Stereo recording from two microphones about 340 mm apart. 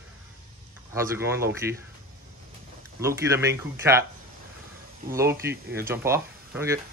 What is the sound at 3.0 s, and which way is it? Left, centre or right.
Speech, centre.